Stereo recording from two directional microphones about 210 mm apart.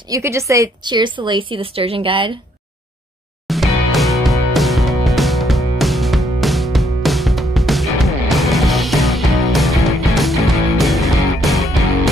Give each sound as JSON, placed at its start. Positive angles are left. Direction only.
{"t": 0.1, "sound": "a woman's voice", "side_deg": -15}
{"t": 3.4, "sound": "music", "side_deg": 0}